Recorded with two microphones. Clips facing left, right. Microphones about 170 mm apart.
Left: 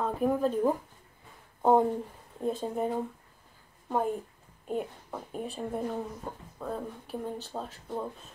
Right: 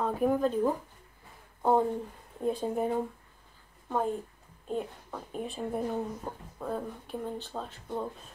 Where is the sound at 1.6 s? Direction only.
15° left (ahead or behind).